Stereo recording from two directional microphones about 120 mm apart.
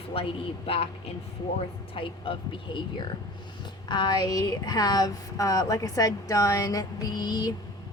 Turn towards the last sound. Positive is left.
turn(degrees=35)  # may be behind; listen again after turning